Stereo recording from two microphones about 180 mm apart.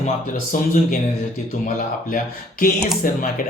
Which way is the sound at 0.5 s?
45° left (ahead or behind).